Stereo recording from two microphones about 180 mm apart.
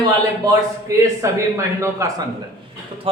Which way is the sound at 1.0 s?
15° right (ahead or behind).